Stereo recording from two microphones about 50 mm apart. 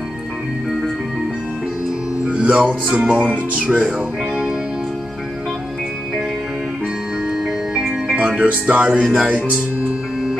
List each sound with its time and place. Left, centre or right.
2.2 s music: right
8.2 s music: right
9.0 s music: centre